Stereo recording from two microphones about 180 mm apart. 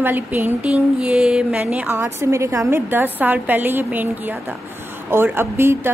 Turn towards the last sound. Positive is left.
turn(degrees=-15)  # may be behind; listen again after turning